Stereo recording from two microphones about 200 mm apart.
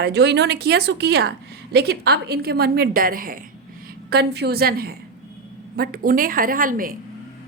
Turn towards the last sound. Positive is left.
turn(degrees=-45)  # may be behind; listen again after turning